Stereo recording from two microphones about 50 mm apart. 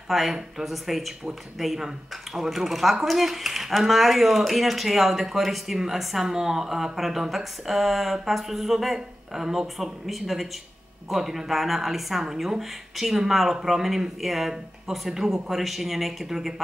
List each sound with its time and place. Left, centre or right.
0.1 s speech: centre